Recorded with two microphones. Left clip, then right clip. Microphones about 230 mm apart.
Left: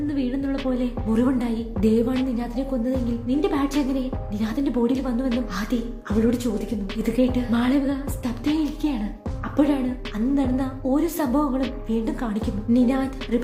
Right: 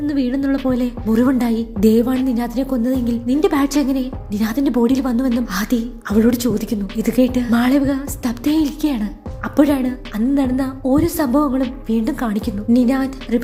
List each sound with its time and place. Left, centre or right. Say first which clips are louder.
0.1 s a sound: right 7 dB; right
0.7 s music: right 6 dB; right
9.4 s a woman's voice: right 6 dB; right